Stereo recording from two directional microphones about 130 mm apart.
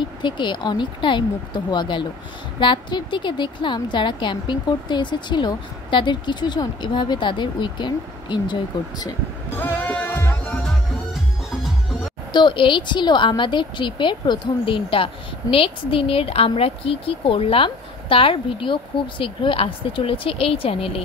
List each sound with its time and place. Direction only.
0.2 s a woman's voice: 35° left (ahead or behind)
9.6 s music: 15° left (ahead or behind)
12.3 s a woman's voice: 35° left (ahead or behind)